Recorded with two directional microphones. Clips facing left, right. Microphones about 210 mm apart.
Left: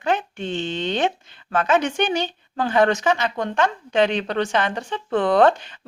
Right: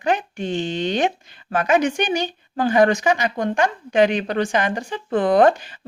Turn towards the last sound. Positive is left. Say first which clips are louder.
# right 1 dB
turn(degrees=-10)  # may be behind; listen again after turning